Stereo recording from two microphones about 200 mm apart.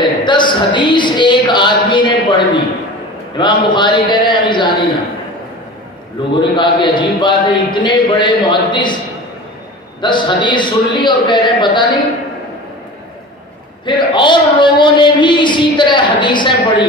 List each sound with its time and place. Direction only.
0.2 s a man's voice: 25° left (ahead or behind)
6.3 s a man's voice: 25° left (ahead or behind)
10.0 s a man's voice: 25° left (ahead or behind)
13.8 s a man's voice: 25° left (ahead or behind)